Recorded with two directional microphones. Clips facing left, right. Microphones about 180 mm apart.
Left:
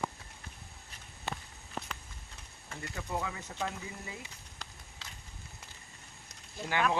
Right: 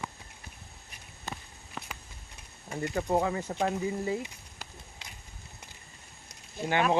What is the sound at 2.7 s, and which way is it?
Speech, 20° right (ahead or behind).